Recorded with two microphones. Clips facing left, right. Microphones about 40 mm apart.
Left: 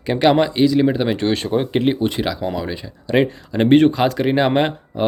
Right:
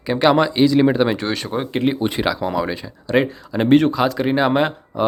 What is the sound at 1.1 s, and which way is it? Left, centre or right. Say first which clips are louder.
Speech: left 4 dB; centre.